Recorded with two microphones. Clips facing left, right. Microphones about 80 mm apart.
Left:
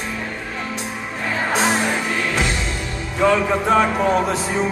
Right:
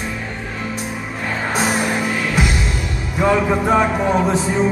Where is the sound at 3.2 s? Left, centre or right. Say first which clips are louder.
Right 1 dB; centre.